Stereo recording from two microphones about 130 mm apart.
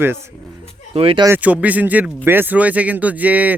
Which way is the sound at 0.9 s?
45° right (ahead or behind).